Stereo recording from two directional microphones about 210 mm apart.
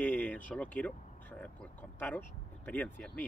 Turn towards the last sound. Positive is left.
turn(degrees=5)  # may be behind; listen again after turning